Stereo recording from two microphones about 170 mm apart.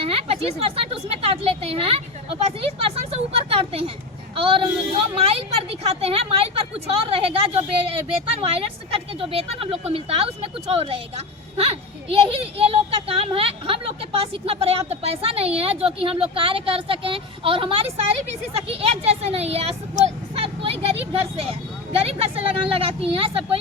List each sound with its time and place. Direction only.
0.0 s speech: 35° right (ahead or behind)